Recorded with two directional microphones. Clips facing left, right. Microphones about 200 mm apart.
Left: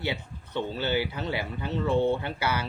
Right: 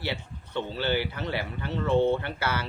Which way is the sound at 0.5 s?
15° left (ahead or behind).